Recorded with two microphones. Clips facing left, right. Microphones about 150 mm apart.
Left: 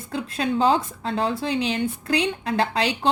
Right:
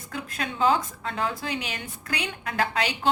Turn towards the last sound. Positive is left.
turn(degrees=30)  # may be behind; listen again after turning